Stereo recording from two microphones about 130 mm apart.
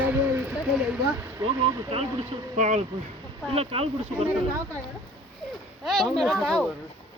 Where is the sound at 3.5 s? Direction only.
50° right (ahead or behind).